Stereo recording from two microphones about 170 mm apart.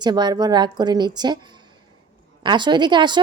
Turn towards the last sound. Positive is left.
turn(degrees=-25)  # may be behind; listen again after turning